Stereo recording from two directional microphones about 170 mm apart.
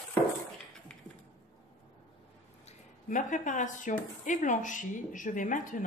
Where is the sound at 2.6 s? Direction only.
50° left (ahead or behind).